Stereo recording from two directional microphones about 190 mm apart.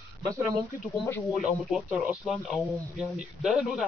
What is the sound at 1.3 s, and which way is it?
Speech, centre (ahead or behind).